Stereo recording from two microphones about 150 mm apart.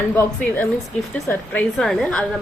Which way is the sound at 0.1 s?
10° left (ahead or behind).